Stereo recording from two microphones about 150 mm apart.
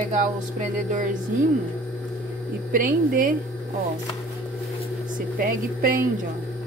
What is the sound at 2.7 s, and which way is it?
Speech, 65° right (ahead or behind).